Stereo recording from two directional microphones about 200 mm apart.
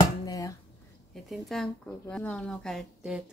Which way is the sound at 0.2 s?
15° left (ahead or behind).